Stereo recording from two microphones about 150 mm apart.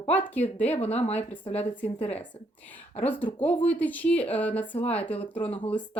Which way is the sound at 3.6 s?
10° left (ahead or behind).